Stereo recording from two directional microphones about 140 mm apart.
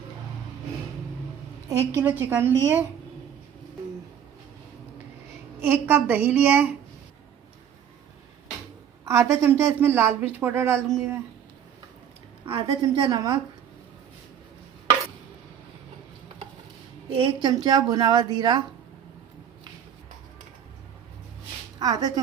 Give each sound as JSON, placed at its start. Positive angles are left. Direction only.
{"t": 2.0, "sound": "a woman's voice", "side_deg": -15}
{"t": 5.5, "sound": "a woman's voice", "side_deg": -15}
{"t": 9.0, "sound": "a woman's voice", "side_deg": -20}
{"t": 12.5, "sound": "a woman's voice", "side_deg": -40}
{"t": 13.1, "sound": "a woman's voice", "side_deg": -30}
{"t": 17.1, "sound": "a woman's voice", "side_deg": -40}
{"t": 21.8, "sound": "speech", "side_deg": -25}